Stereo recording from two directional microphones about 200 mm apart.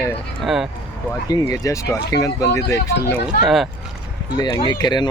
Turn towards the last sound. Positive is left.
turn(degrees=20)  # may be behind; listen again after turning